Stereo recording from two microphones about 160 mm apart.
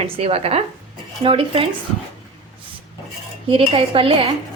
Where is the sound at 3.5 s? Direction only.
35° right (ahead or behind).